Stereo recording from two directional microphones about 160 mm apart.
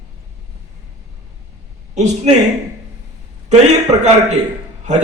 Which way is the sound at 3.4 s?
45° right (ahead or behind).